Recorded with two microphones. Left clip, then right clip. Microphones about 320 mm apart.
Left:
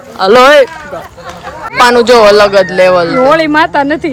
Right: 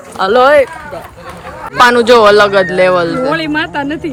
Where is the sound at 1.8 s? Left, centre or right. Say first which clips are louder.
Left 2 dB; centre.